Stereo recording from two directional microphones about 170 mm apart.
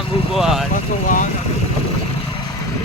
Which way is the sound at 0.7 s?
50° left (ahead or behind).